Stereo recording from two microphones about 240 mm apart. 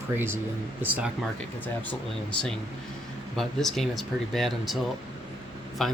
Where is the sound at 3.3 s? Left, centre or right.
Centre.